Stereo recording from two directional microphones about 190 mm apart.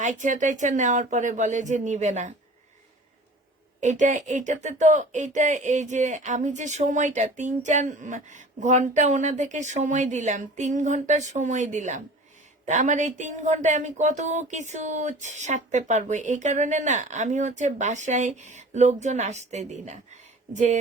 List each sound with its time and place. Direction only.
0.0 s speech: 40° right (ahead or behind)
3.8 s speech: 40° right (ahead or behind)